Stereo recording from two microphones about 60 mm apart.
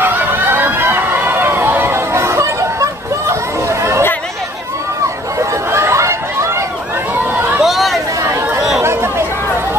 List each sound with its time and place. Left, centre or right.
0.0 s a sound: right
1.6 s chatter: right
5.4 s chatter: right
7.6 s chatter: centre
8.2 s chatter: right